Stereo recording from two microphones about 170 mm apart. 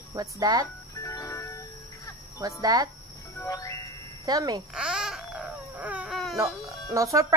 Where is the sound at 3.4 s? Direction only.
20° left (ahead or behind).